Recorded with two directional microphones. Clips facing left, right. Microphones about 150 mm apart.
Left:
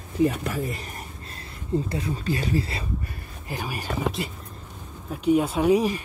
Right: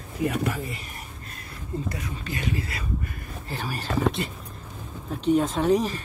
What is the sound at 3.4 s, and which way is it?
Speech, 15° left (ahead or behind).